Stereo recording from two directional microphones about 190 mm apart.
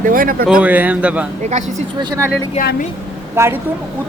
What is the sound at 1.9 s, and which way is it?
Speech, 20° right (ahead or behind).